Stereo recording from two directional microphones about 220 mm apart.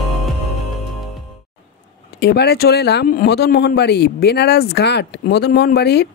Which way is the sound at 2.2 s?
50° left (ahead or behind).